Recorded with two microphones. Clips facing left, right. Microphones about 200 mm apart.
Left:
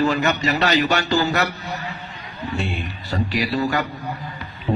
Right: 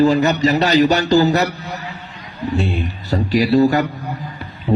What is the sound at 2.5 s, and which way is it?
A man's voice, 40° right (ahead or behind).